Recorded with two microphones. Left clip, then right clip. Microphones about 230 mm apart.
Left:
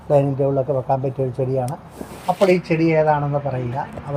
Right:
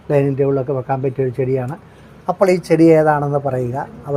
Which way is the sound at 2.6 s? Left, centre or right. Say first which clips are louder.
Right 6 dB; right.